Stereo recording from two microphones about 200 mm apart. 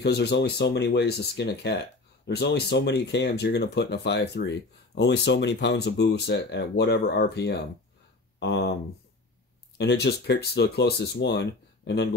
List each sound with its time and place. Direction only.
0.0 s speech: 55° left (ahead or behind)
9.8 s speech: 55° left (ahead or behind)